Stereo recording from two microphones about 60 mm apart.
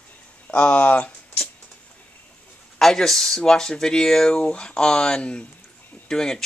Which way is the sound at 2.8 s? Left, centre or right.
Centre.